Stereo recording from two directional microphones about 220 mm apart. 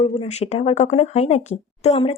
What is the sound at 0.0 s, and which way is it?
Speech, 25° left (ahead or behind).